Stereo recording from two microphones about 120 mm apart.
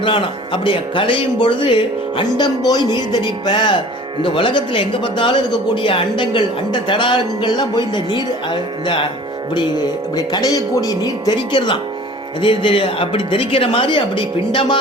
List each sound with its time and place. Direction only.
0.0 s speech: 45° left (ahead or behind)
10.2 s speech: 35° left (ahead or behind)